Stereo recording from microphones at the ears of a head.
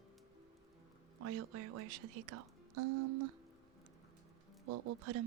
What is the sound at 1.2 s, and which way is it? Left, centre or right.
Speech, right.